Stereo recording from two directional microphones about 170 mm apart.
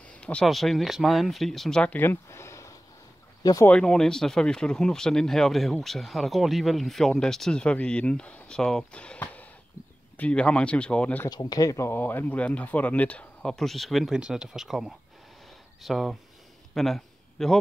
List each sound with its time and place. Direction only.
0.1 s speech: 5° left (ahead or behind)
3.7 s speech: 5° left (ahead or behind)
9.8 s a sound: 50° left (ahead or behind)
10.1 s speech: 5° left (ahead or behind)
11.2 s speech: 25° left (ahead or behind); by 15.0 s centre (ahead or behind)
15.4 s a sound: centre (ahead or behind)